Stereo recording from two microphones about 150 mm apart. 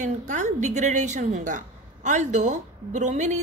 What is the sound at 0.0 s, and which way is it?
A woman's voice, 55° right (ahead or behind).